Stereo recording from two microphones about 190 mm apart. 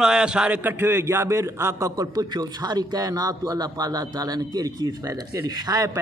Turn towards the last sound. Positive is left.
turn(degrees=-20)  # may be behind; listen again after turning